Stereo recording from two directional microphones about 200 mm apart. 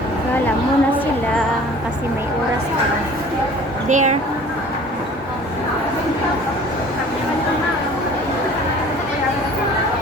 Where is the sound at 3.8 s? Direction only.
35° right (ahead or behind).